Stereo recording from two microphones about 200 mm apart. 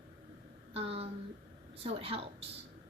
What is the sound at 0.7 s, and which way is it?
A woman's voice, 30° right (ahead or behind).